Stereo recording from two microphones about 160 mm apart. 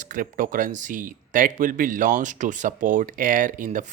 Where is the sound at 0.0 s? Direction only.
55° right (ahead or behind).